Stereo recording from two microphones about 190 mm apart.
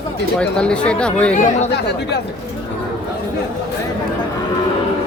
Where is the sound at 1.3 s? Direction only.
40° left (ahead or behind).